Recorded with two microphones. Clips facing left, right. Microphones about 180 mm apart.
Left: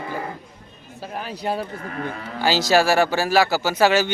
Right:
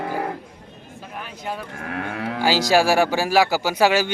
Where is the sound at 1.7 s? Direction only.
75° right (ahead or behind).